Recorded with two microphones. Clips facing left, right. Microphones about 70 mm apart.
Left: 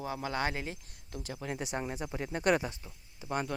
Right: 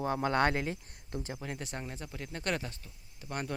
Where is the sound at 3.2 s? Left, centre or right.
Centre.